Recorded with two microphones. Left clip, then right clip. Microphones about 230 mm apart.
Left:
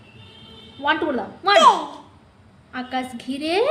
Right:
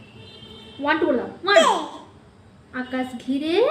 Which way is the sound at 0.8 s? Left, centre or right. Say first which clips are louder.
Right 1 dB; left.